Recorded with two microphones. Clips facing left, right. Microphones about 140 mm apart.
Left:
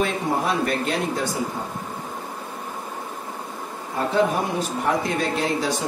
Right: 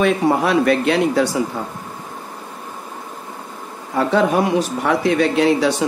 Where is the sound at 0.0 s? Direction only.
85° right.